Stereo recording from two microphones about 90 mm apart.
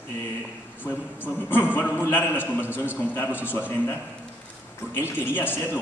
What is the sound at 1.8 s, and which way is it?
Speech, 20° left (ahead or behind).